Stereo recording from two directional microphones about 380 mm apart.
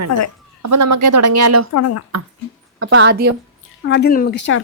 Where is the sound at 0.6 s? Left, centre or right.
Right.